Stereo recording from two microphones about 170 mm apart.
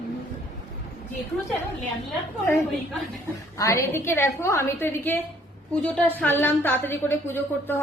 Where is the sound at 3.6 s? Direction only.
15° left (ahead or behind).